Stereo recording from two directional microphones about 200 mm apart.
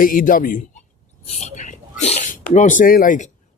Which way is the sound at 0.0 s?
45° left (ahead or behind).